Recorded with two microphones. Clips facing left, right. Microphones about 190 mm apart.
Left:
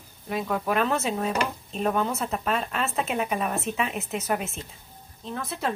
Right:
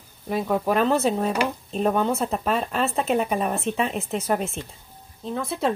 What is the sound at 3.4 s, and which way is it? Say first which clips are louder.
Speech: right 3 dB; 30° right (ahead or behind).